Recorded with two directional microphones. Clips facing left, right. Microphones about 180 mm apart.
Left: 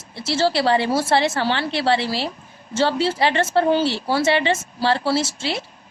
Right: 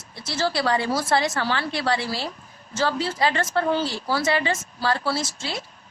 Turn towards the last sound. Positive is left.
turn(degrees=25)  # may be behind; listen again after turning